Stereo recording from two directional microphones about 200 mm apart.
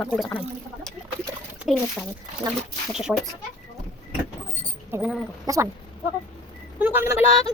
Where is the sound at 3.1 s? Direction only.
5° right (ahead or behind).